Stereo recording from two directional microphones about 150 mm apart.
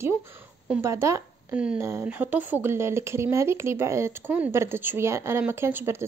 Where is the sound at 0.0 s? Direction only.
15° right (ahead or behind).